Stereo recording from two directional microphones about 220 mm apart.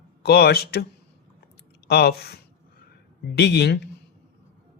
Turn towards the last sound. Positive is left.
turn(degrees=50)  # may be behind; listen again after turning